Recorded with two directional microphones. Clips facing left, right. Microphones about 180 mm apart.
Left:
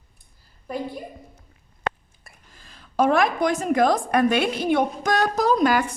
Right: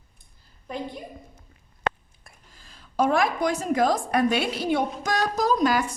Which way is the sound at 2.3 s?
5° left (ahead or behind).